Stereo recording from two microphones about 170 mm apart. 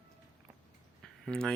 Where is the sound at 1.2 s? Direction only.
5° left (ahead or behind).